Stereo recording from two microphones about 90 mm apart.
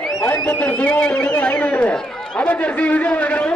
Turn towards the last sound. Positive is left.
turn(degrees=15)  # may be behind; listen again after turning